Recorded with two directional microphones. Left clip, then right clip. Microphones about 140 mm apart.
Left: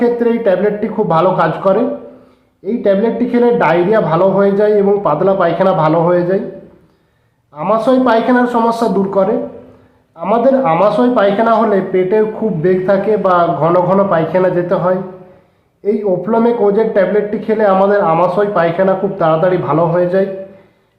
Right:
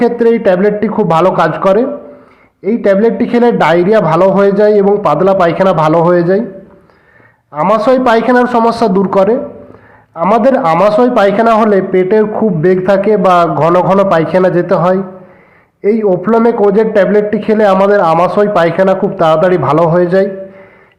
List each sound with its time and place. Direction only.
0.0 s a man's voice: 30° right (ahead or behind)
7.5 s a man's voice: 30° right (ahead or behind)